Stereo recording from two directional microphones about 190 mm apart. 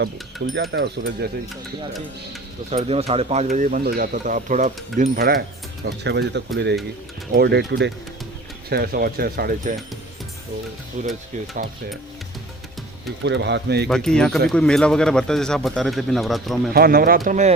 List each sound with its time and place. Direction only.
0.5 s speech: 70° right (ahead or behind)
2.6 s speech: 35° right (ahead or behind); by 5.4 s 50° right (ahead or behind)
6.0 s speech: 65° right (ahead or behind)
8.7 s speech: 55° right (ahead or behind)
11.0 s speech: 40° right (ahead or behind)
13.2 s speech: 65° right (ahead or behind)
13.8 s speech: 5° left (ahead or behind)
16.7 s speech: 50° right (ahead or behind)
17.2 s speech: 40° right (ahead or behind)